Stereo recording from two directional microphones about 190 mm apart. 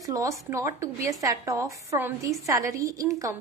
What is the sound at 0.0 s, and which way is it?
A woman's voice, 20° right (ahead or behind).